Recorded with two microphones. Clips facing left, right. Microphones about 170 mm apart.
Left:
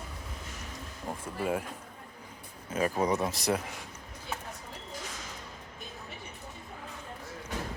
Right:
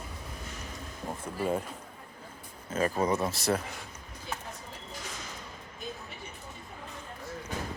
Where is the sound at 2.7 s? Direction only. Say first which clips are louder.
Even; 15° left (ahead or behind).